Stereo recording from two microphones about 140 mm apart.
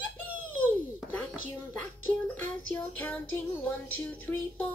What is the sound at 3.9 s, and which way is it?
Speech, 10° left (ahead or behind).